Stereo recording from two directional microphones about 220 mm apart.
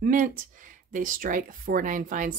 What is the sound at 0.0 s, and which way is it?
Speech, 35° right (ahead or behind).